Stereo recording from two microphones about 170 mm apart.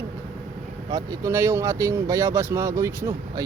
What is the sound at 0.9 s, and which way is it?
Speech, 20° right (ahead or behind).